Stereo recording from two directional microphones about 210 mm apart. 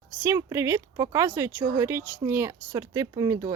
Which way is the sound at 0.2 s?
15° right (ahead or behind).